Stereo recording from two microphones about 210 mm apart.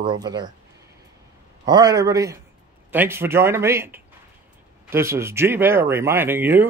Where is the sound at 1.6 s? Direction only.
20° right (ahead or behind).